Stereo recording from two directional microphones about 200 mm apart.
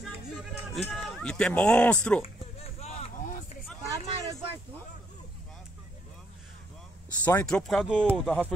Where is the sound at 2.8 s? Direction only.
30° left (ahead or behind).